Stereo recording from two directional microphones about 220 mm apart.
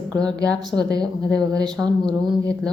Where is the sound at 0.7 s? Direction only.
15° right (ahead or behind).